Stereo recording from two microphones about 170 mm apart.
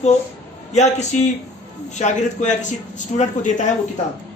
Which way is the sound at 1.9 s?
45° left (ahead or behind).